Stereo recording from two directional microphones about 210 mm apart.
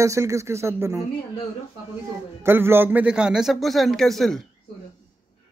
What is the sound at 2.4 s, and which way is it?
A man's voice, 10° right (ahead or behind).